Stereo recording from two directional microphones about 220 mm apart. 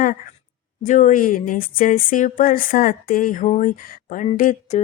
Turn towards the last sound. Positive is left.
turn(degrees=35)  # may be behind; listen again after turning